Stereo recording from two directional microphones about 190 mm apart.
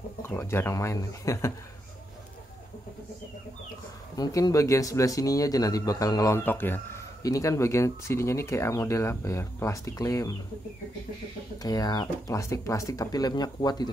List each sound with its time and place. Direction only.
0.2 s speech: 15° left (ahead or behind)
4.2 s speech: 20° left (ahead or behind)
11.5 s speech: 20° left (ahead or behind)